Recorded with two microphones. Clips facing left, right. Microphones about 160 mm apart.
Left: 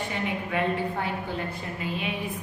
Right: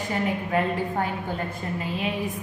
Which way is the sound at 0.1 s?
40° right (ahead or behind).